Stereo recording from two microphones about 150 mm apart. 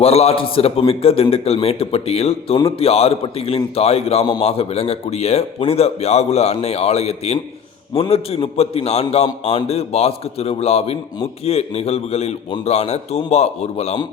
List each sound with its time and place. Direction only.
0.0 s a man's voice: 40° left (ahead or behind)